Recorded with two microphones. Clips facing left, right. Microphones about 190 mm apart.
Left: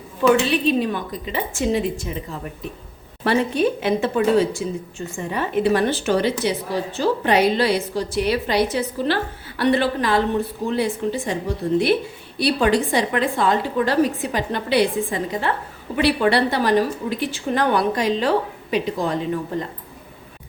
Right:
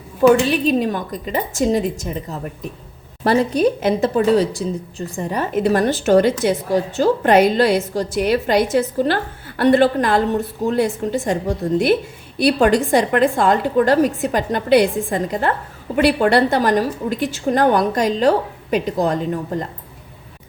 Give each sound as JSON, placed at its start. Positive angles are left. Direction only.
{"t": 0.2, "sound": "a woman's voice", "side_deg": -45}
{"t": 3.2, "sound": "a woman's voice", "side_deg": -40}